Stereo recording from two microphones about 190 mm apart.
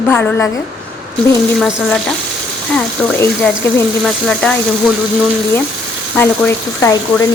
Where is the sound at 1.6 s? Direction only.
Centre (ahead or behind).